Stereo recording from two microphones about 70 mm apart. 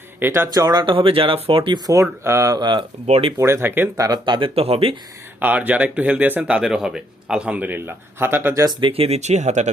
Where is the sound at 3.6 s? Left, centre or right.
Right.